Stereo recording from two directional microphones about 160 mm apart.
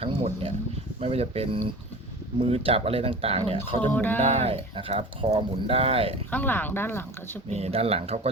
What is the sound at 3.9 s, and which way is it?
Speech, 10° left (ahead or behind).